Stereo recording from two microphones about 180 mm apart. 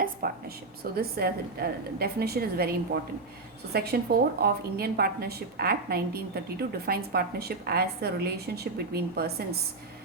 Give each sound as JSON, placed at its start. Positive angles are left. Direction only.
{"t": 0.2, "sound": "a woman's voice", "side_deg": -50}